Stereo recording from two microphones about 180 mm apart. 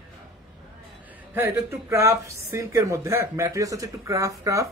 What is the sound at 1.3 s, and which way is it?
Speech, 15° right (ahead or behind).